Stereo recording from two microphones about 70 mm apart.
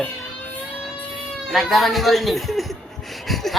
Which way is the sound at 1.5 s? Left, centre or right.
Centre.